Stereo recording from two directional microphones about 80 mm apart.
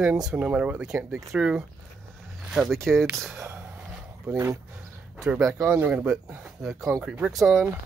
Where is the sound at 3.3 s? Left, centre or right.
Right.